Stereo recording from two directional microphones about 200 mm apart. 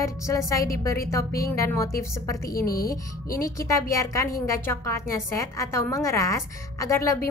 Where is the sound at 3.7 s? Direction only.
15° left (ahead or behind).